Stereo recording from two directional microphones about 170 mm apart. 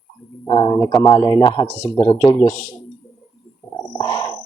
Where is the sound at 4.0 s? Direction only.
25° left (ahead or behind).